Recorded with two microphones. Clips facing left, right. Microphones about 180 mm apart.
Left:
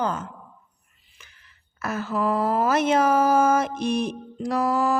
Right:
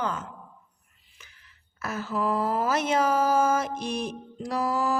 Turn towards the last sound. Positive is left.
turn(degrees=60)  # may be behind; listen again after turning